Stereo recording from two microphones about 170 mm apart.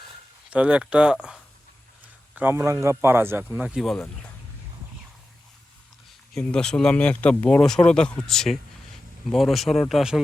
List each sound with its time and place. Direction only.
0.5 s a man's voice: 5° right (ahead or behind)
3.8 s speech: centre (ahead or behind)
6.3 s speech: 5° left (ahead or behind)